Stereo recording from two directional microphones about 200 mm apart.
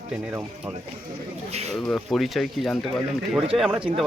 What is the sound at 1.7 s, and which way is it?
Speech, centre (ahead or behind).